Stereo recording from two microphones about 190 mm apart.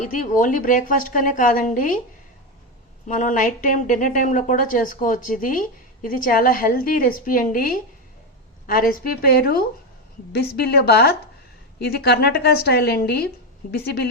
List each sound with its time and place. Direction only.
0.1 s a woman's voice: 45° left (ahead or behind)
3.1 s a woman's voice: 45° left (ahead or behind)